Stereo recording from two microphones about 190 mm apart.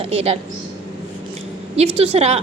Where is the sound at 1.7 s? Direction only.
30° right (ahead or behind).